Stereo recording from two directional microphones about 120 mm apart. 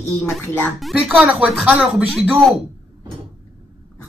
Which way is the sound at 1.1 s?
10° right (ahead or behind).